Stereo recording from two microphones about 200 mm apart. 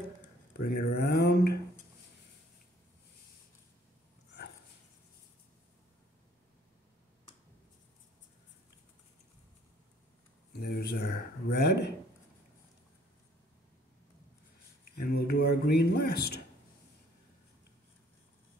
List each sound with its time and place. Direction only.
0.5 s speech: 55° left (ahead or behind)
10.6 s speech: 55° left (ahead or behind)
15.0 s speech: 50° left (ahead or behind)